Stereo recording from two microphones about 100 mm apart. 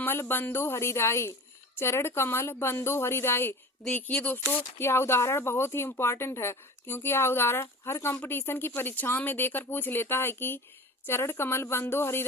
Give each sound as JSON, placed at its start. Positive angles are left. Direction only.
{"t": 0.0, "sound": "speech", "side_deg": 20}